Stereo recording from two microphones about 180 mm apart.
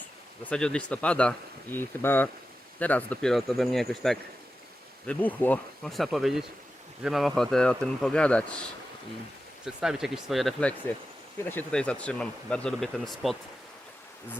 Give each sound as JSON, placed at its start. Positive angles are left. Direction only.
{"t": 0.4, "sound": "speech", "side_deg": 5}
{"t": 9.6, "sound": "speech", "side_deg": -5}